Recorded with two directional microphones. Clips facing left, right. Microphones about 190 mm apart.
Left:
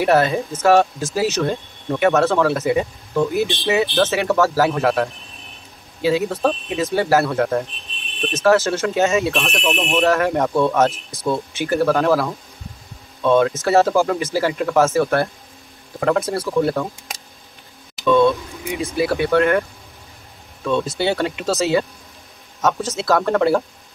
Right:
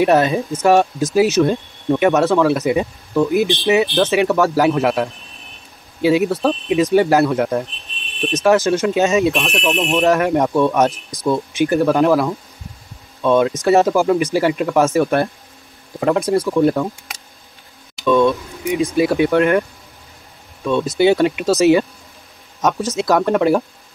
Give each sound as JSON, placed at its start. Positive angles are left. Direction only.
{"t": 0.0, "sound": "speech", "side_deg": -20}
{"t": 6.0, "sound": "speech", "side_deg": -15}
{"t": 18.0, "sound": "speech", "side_deg": -15}
{"t": 20.6, "sound": "speech", "side_deg": -15}